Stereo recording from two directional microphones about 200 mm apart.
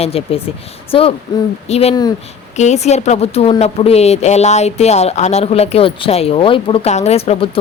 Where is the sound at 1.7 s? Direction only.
30° left (ahead or behind).